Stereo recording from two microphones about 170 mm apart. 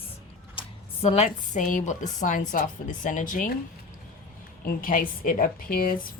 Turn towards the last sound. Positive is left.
turn(degrees=55)  # may be behind; listen again after turning